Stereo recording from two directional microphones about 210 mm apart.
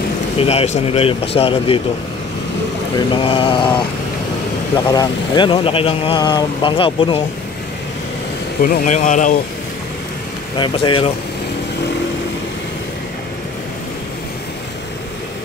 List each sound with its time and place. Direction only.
0.4 s speech: 30° left (ahead or behind)
3.2 s speech: 25° left (ahead or behind)
4.8 s speech: 20° left (ahead or behind)
8.6 s speech: 35° left (ahead or behind)
10.6 s speech: 25° left (ahead or behind)